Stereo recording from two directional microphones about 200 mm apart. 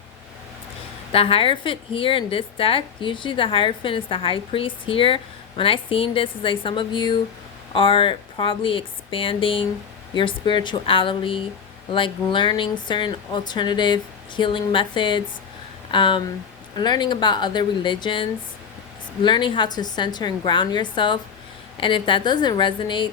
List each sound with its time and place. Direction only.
1.1 s speech: 30° left (ahead or behind)